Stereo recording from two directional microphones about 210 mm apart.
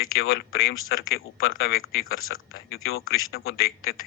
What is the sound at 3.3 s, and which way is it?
Speech, 50° left (ahead or behind).